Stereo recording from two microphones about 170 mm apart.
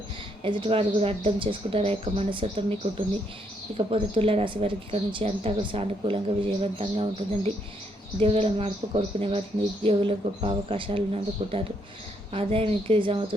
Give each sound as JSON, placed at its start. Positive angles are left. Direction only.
{"t": 0.4, "sound": "speech", "side_deg": -30}
{"t": 3.8, "sound": "speech", "side_deg": -30}